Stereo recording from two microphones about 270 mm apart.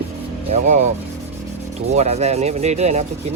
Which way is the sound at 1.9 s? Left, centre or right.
Right.